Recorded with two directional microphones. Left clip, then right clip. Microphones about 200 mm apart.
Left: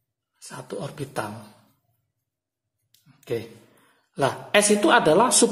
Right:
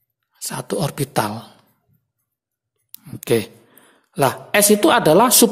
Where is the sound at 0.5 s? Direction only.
35° right (ahead or behind).